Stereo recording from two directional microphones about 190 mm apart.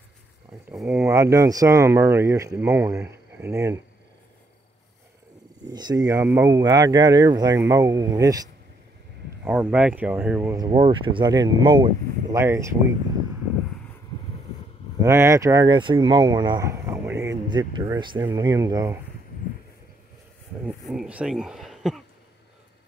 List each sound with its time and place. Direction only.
0.7 s speech: 5° right (ahead or behind)
1.0 s speech: 15° right (ahead or behind)
5.7 s speech: 20° right (ahead or behind)
9.4 s speech: 10° right (ahead or behind)
15.0 s speech: 15° right (ahead or behind)
20.6 s speech: 5° right (ahead or behind)